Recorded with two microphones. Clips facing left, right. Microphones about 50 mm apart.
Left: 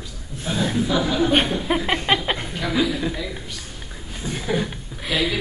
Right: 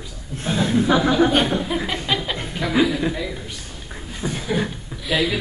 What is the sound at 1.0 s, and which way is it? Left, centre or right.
Speech, right.